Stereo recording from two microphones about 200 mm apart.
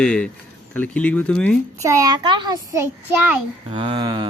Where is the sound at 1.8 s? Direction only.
15° right (ahead or behind).